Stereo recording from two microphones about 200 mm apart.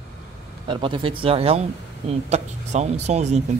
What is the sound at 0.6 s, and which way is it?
Speech, 25° right (ahead or behind).